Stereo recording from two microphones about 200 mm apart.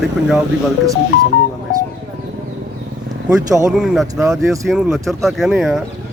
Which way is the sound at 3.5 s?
15° right (ahead or behind).